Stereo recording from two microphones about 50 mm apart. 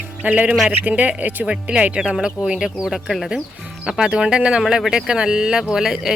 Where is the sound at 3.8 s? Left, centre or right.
Centre.